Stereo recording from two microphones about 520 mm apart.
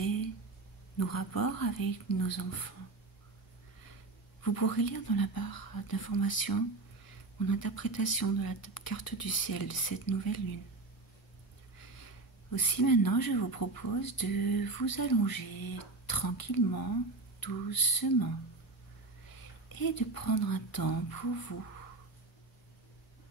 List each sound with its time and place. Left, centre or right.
0.9 s speech: left
4.4 s speech: left
12.4 s speech: left
19.7 s speech: left